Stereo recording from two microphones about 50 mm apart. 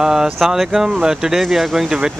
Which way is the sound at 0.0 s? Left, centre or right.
Centre.